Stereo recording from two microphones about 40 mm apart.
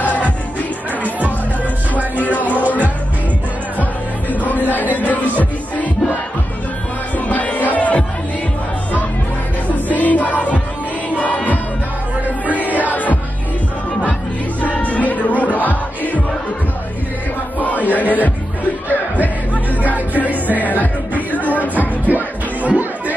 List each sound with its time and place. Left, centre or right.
0.0 s music: left
2.1 s music: left
4.3 s music: left
7.2 s music: left
9.8 s music: left
14.6 s music: left
17.6 s a sound: left
19.2 s music: left
21.7 s music: right